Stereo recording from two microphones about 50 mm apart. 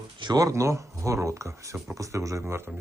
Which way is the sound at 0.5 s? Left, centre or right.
Right.